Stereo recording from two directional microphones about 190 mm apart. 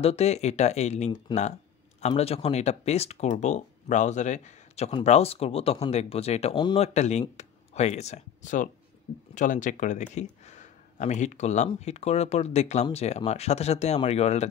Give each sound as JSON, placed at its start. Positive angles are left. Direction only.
{"t": 0.0, "sound": "speech", "side_deg": 35}